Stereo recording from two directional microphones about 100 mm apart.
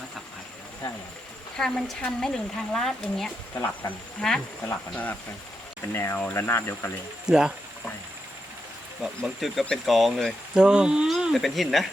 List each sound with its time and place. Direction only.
1.5 s speech: 5° left (ahead or behind)
3.5 s speech: 20° left (ahead or behind)
5.9 s speech: 25° left (ahead or behind)
7.3 s speech: 5° right (ahead or behind)
9.2 s speech: centre (ahead or behind)
10.5 s speech: 10° right (ahead or behind)